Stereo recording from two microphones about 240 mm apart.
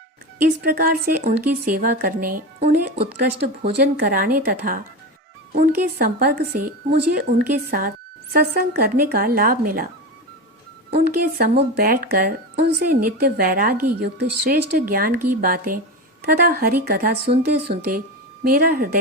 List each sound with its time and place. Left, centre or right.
0.6 s speech: right
10.9 s speech: right